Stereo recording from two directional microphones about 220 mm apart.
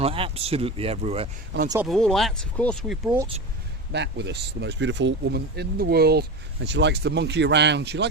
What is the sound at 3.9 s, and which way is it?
Speech, 50° right (ahead or behind).